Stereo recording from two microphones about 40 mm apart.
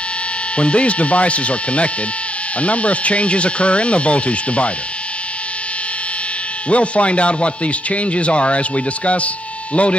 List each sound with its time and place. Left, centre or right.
0.6 s speech: left
6.7 s speech: left